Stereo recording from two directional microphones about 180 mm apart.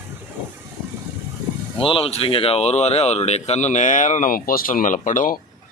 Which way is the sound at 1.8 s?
30° left (ahead or behind).